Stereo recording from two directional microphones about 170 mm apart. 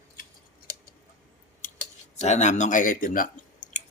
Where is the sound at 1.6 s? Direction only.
50° left (ahead or behind).